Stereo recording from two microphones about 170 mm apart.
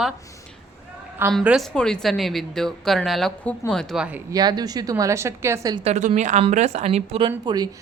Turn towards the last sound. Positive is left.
turn(degrees=-25)  # may be behind; listen again after turning